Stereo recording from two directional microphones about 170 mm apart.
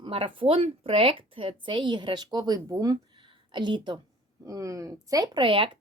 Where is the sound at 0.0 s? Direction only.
30° right (ahead or behind).